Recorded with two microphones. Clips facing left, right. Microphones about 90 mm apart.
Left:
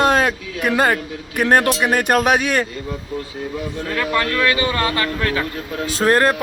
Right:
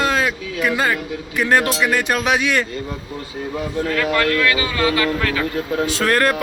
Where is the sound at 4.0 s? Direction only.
25° left (ahead or behind).